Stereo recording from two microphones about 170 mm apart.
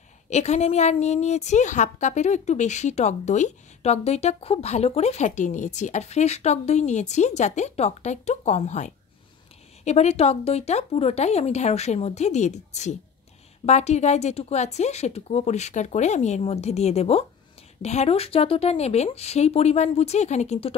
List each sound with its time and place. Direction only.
0.3 s a woman's voice: 40° left (ahead or behind)